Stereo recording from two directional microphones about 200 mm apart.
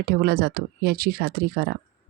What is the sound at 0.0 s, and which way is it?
Speech, 50° right (ahead or behind).